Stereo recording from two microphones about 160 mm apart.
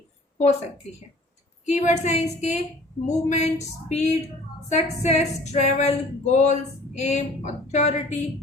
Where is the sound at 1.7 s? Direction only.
45° left (ahead or behind).